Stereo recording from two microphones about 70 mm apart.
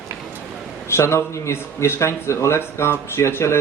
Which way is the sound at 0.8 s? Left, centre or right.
Left.